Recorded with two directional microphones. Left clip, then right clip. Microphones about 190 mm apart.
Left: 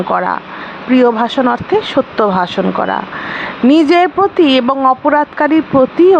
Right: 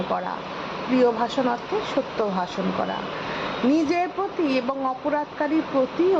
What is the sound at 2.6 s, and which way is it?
Speech, 35° left (ahead or behind).